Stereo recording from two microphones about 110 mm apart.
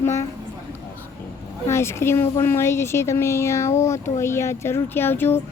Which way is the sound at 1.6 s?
25° left (ahead or behind).